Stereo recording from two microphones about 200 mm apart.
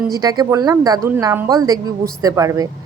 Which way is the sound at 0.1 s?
20° right (ahead or behind).